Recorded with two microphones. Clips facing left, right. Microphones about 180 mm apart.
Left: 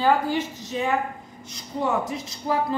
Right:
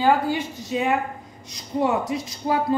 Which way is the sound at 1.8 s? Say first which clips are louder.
Right 3 dB; 15° right (ahead or behind).